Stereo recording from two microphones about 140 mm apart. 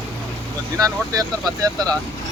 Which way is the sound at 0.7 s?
25° right (ahead or behind).